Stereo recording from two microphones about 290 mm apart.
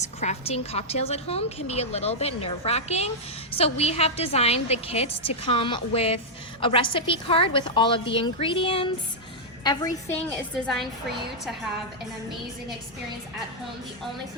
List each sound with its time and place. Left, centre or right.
0.0 s a woman's voice: left